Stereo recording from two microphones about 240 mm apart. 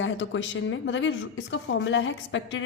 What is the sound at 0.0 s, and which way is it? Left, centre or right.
Speech, left.